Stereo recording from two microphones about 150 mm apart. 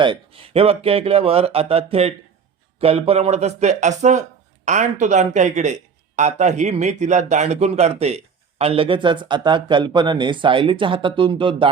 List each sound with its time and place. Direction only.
0.0 s speech: 35° right (ahead or behind)